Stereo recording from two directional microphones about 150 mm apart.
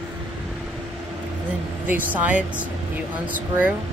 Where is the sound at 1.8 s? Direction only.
10° right (ahead or behind).